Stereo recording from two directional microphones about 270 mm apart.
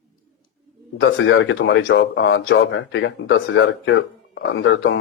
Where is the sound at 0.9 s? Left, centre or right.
Left.